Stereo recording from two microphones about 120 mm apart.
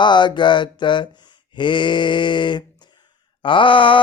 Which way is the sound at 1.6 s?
40° left (ahead or behind).